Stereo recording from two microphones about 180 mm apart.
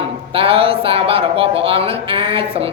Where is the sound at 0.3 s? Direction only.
30° right (ahead or behind).